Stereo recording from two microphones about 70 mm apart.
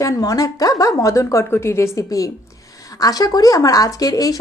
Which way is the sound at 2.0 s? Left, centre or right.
Left.